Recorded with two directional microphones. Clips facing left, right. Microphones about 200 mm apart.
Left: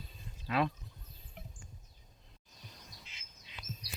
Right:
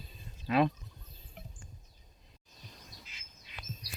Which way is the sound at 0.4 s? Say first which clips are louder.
Right 5 dB; 20° right (ahead or behind).